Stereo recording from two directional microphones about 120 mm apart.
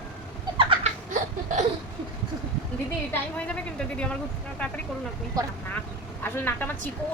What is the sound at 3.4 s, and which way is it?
Speech, 10° left (ahead or behind).